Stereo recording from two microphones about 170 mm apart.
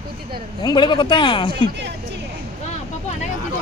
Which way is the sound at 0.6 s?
25° left (ahead or behind).